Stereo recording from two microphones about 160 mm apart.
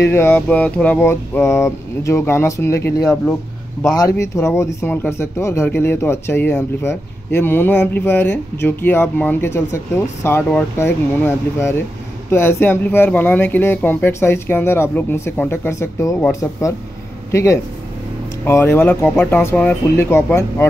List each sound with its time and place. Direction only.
0.1 s speech: 10° left (ahead or behind)